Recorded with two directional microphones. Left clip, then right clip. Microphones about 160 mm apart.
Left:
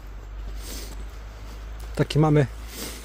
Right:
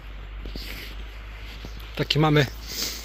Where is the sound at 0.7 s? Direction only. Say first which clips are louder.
Even; 65° left (ahead or behind).